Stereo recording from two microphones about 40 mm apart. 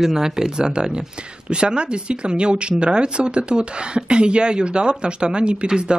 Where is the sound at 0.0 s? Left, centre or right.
Centre.